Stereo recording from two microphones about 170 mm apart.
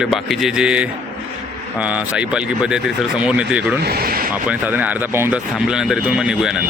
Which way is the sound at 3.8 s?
65° right (ahead or behind).